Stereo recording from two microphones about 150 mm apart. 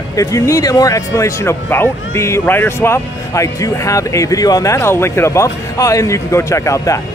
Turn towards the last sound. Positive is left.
turn(degrees=20)  # may be behind; listen again after turning